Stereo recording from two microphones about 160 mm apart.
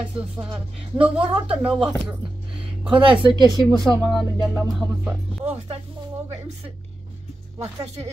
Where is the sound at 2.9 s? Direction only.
30° right (ahead or behind).